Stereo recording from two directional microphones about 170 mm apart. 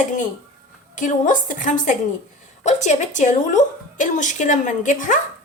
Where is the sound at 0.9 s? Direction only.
50° left (ahead or behind).